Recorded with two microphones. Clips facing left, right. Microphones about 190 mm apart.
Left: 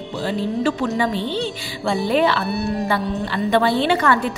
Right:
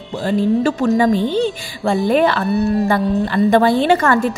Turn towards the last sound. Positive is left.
turn(degrees=-45)  # may be behind; listen again after turning